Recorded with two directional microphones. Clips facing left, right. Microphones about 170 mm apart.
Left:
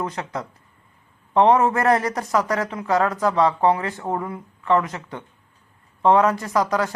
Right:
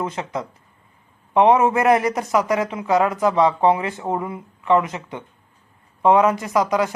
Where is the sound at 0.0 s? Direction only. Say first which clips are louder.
Right 2 dB; 20° right (ahead or behind).